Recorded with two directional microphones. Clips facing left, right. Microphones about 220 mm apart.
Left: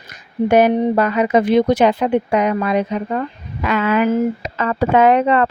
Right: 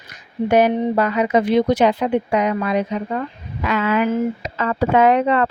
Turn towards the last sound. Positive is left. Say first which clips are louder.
# left 2 dB
turn(degrees=60)  # may be behind; listen again after turning